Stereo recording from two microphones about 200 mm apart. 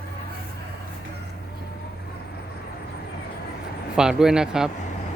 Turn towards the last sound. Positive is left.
turn(degrees=-5)  # may be behind; listen again after turning